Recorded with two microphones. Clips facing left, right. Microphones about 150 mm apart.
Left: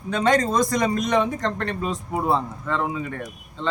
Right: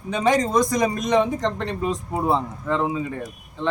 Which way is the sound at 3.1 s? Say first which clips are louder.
Right 1 dB; 5° right (ahead or behind).